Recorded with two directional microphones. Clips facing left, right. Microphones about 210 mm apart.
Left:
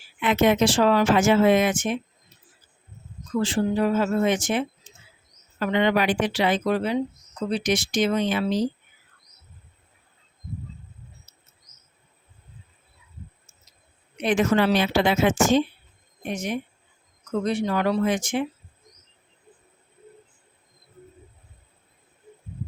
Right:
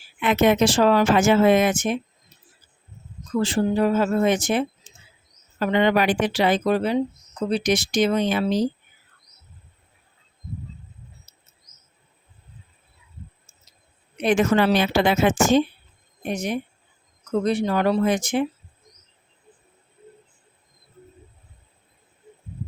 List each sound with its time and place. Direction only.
0.2 s speech: 50° right (ahead or behind)
3.4 s speech: 40° right (ahead or behind)
11.3 s cricket: 30° right (ahead or behind)
14.2 s speech: 45° right (ahead or behind)
16.2 s speech: 35° right (ahead or behind)